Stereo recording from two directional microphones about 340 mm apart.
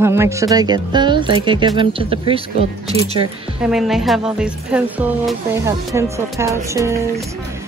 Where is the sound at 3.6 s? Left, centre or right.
Centre.